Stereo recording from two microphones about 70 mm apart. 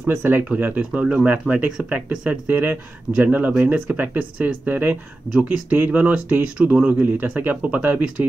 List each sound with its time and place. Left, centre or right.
0.1 s speech: right
0.5 s speech: right